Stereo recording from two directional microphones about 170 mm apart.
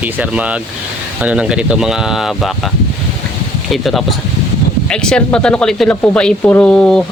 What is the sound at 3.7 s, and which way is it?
Speech, centre (ahead or behind).